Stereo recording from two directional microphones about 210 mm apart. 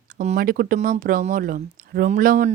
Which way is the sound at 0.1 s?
35° right (ahead or behind).